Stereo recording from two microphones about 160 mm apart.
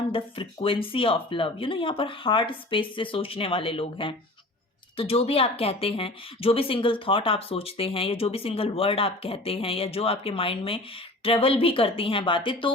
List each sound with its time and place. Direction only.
0.1 s a woman's voice: 35° left (ahead or behind)